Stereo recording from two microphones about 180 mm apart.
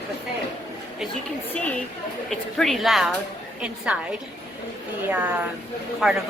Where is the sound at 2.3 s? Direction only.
Centre (ahead or behind).